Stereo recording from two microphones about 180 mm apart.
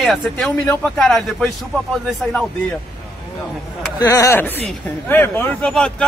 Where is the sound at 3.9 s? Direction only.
20° left (ahead or behind).